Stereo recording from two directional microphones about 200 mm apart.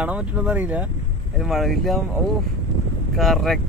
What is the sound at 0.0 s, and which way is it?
Speech, 5° right (ahead or behind).